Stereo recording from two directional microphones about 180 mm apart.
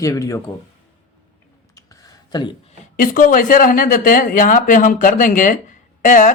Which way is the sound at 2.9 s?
50° left (ahead or behind).